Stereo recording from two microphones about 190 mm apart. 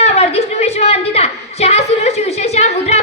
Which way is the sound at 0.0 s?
35° left (ahead or behind).